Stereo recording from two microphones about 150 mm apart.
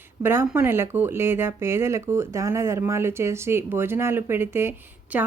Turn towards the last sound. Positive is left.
turn(degrees=-15)  # may be behind; listen again after turning